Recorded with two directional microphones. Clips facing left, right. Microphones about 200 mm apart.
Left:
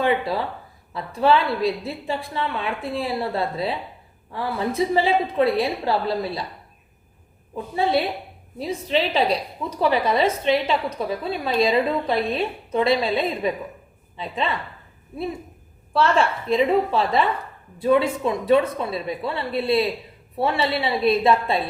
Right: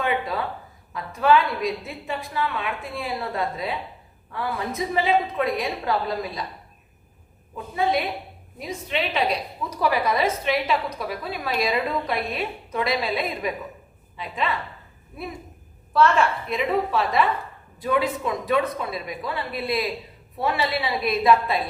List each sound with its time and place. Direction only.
0.0 s a woman's voice: 30° left (ahead or behind)
7.5 s a woman's voice: 30° left (ahead or behind)
15.9 s a woman's voice: 30° left (ahead or behind)